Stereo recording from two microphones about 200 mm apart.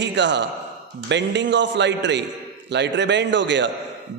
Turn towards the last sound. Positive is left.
turn(degrees=-60)  # may be behind; listen again after turning